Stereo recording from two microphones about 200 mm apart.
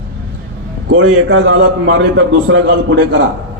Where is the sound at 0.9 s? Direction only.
80° right.